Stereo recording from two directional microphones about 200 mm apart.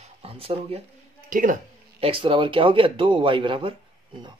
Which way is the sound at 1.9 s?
25° right (ahead or behind).